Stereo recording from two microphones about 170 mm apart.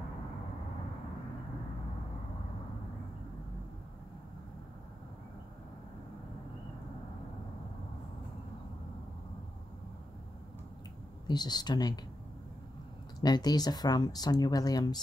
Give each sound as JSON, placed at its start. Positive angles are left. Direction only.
{"t": 11.2, "sound": "speech", "side_deg": 25}
{"t": 13.2, "sound": "speech", "side_deg": 25}